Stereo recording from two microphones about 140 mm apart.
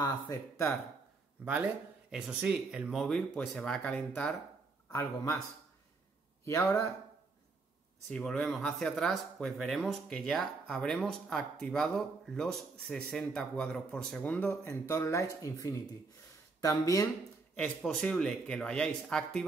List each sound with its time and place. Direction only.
0.0 s speech: 20° left (ahead or behind)
1.4 s speech: 10° right (ahead or behind); by 4.4 s 10° left (ahead or behind)
4.9 s speech: 20° left (ahead or behind)
6.4 s speech: 20° left (ahead or behind)
8.1 s speech: 5° left (ahead or behind); by 17.1 s 25° left (ahead or behind)
17.6 s speech: 5° left (ahead or behind)